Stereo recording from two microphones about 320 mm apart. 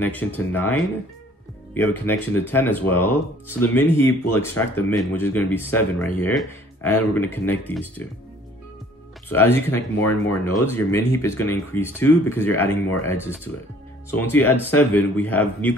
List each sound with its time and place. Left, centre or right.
0.0 s speech: centre
9.3 s speech: centre
14.1 s speech: centre